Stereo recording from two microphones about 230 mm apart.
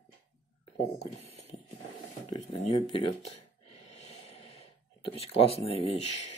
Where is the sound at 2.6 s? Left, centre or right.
Left.